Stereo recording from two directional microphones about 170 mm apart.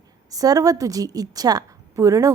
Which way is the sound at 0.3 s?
20° right (ahead or behind).